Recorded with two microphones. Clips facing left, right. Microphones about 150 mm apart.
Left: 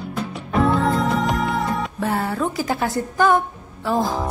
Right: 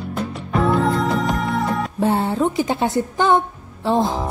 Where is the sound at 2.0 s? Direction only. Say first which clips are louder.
Right 5 dB; 25° right (ahead or behind).